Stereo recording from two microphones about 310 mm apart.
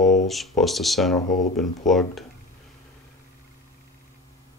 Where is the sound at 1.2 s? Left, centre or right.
Left.